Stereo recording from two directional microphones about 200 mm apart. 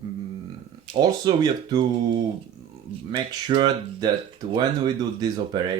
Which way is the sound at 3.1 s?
25° right (ahead or behind).